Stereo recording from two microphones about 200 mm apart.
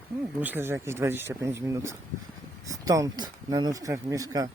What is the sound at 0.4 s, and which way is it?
Speech, 10° right (ahead or behind).